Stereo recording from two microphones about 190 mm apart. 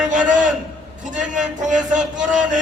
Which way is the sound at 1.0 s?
40° right (ahead or behind).